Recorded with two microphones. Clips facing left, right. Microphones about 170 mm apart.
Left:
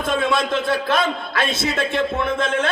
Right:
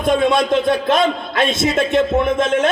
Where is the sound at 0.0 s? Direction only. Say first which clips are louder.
Right 5 dB; 20° right (ahead or behind).